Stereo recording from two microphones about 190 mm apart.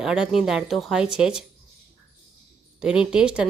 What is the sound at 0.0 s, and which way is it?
A woman's voice, centre (ahead or behind).